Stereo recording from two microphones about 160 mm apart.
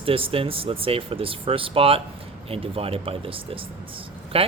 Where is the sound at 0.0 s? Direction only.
35° right (ahead or behind).